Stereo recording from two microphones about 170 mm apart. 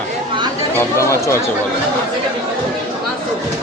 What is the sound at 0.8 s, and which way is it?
Speech, 15° left (ahead or behind).